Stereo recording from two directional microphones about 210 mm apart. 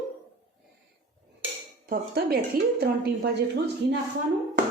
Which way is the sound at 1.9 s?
45° right (ahead or behind).